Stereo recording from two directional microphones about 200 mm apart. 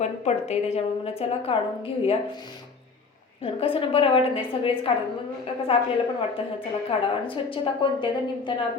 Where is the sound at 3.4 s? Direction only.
30° left (ahead or behind).